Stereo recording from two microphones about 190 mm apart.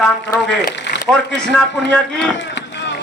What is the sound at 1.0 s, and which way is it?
A man's voice, 5° left (ahead or behind).